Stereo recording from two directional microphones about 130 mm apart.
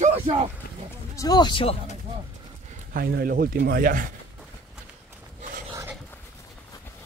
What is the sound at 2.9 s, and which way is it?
Speech, 90° right.